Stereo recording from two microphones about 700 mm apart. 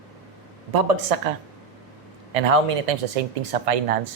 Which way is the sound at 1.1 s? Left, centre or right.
Right.